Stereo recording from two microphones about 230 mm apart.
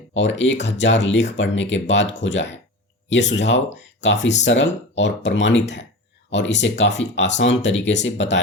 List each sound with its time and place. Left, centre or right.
0.2 s speech: left